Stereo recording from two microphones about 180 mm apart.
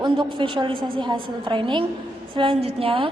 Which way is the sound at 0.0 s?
25° right (ahead or behind).